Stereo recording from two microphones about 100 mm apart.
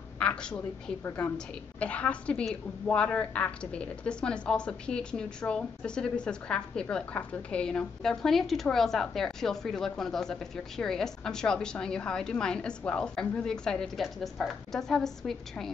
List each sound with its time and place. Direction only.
0.2 s a woman's voice: 10° left (ahead or behind)